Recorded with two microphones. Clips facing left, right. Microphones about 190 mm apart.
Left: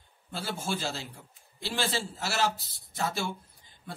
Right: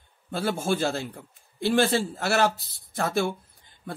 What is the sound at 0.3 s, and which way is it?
A man's voice, 55° right (ahead or behind).